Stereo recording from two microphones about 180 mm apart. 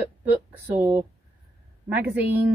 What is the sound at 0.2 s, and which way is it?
Speech, 10° right (ahead or behind).